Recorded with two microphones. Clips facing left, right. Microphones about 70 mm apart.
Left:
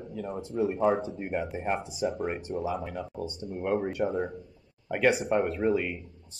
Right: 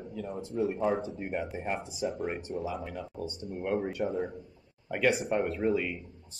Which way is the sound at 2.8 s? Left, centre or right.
Centre.